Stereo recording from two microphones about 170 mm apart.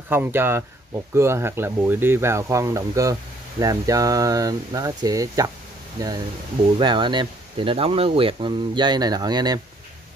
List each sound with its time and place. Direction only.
0.1 s speech: 10° right (ahead or behind)